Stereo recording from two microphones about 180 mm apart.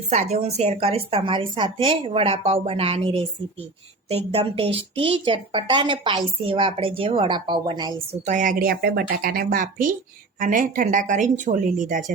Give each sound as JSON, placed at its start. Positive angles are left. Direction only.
{"t": 0.1, "sound": "a woman's voice", "side_deg": -40}
{"t": 8.2, "sound": "speech", "side_deg": -45}